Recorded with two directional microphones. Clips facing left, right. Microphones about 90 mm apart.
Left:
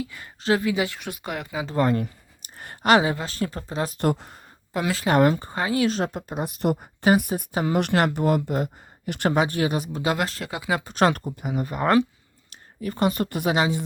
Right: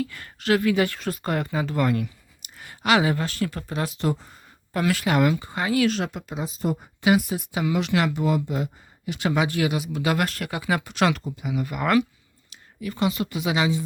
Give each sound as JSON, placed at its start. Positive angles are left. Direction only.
{"t": 0.0, "sound": "speech", "side_deg": 15}
{"t": 1.6, "sound": "speech", "side_deg": 30}
{"t": 2.6, "sound": "a sound", "side_deg": 40}
{"t": 3.0, "sound": "speech", "side_deg": 25}
{"t": 3.9, "sound": "speech", "side_deg": 60}
{"t": 4.7, "sound": "speech", "side_deg": 25}
{"t": 5.1, "sound": "speech", "side_deg": 40}
{"t": 6.4, "sound": "speech", "side_deg": 65}
{"t": 7.0, "sound": "speech", "side_deg": 45}
{"t": 9.3, "sound": "speech", "side_deg": 40}
{"t": 10.0, "sound": "speech", "side_deg": 25}
{"t": 10.9, "sound": "speech", "side_deg": 40}
{"t": 12.5, "sound": "speech", "side_deg": 45}